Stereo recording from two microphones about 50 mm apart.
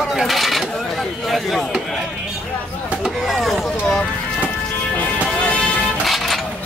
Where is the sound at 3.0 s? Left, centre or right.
Centre.